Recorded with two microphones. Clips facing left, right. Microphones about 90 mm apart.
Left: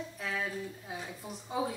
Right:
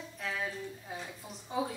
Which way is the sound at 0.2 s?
5° left (ahead or behind).